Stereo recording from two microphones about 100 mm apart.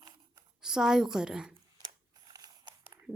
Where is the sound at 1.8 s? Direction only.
40° right (ahead or behind).